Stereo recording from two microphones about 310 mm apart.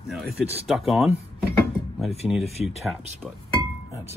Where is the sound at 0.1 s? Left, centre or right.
Centre.